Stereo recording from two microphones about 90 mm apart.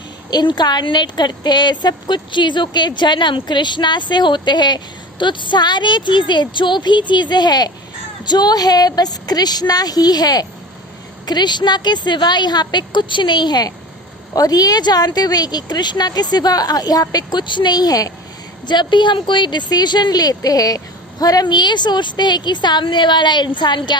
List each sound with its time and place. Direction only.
0.3 s speech: 50° left (ahead or behind)
18.6 s speech: 55° left (ahead or behind)